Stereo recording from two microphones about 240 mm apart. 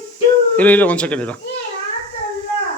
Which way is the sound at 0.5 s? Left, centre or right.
Centre.